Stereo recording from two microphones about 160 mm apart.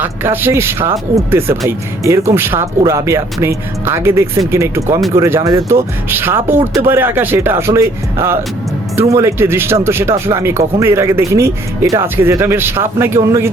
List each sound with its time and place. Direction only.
0.0 s speech: 15° right (ahead or behind)
6.1 s speech: 15° right (ahead or behind)